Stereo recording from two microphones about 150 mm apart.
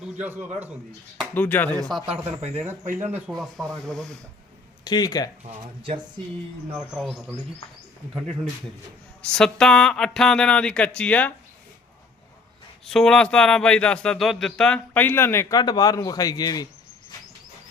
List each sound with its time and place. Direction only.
0.2 s a man's voice: 10° right (ahead or behind)
1.3 s speech: 10° left (ahead or behind)
1.9 s a man's voice: 5° right (ahead or behind)
4.8 s speech: 25° left (ahead or behind)
5.4 s speech: 40° right (ahead or behind)
6.7 s speech: centre (ahead or behind)
9.2 s speech: 5° left (ahead or behind)
12.8 s speech: 5° left (ahead or behind); by 16.6 s 25° left (ahead or behind)